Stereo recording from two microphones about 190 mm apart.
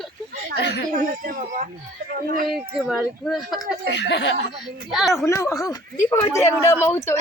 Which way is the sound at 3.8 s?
65° left (ahead or behind).